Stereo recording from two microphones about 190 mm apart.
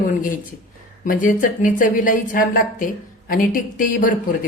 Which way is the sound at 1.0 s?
45° left (ahead or behind).